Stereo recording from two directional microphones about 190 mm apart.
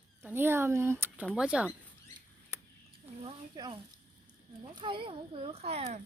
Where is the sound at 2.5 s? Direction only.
10° right (ahead or behind).